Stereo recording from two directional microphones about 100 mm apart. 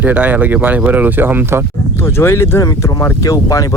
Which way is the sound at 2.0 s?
25° left (ahead or behind).